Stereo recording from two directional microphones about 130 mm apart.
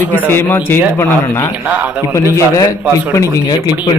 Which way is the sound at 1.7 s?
15° right (ahead or behind).